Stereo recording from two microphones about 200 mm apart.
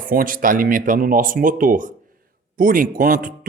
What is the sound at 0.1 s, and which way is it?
Speech, 45° right (ahead or behind).